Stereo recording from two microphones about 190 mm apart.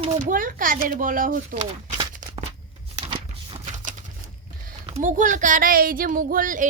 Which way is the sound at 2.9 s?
35° right (ahead or behind).